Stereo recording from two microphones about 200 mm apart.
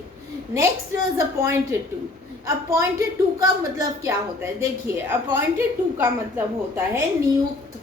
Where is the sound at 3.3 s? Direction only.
15° right (ahead or behind).